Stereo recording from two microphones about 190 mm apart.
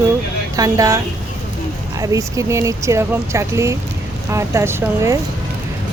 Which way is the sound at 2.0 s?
15° right (ahead or behind).